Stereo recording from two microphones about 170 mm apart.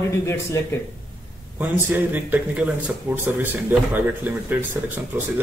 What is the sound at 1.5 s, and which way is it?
Speech, 10° right (ahead or behind).